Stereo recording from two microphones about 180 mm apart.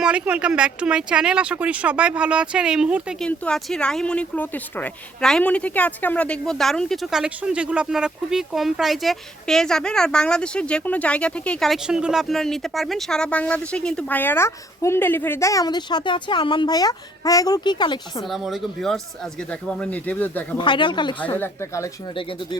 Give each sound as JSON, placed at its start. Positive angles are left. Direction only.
{"t": 0.0, "sound": "speech", "side_deg": -5}
{"t": 18.3, "sound": "speech", "side_deg": 0}
{"t": 20.6, "sound": "speech", "side_deg": 25}
{"t": 21.3, "sound": "speech", "side_deg": 15}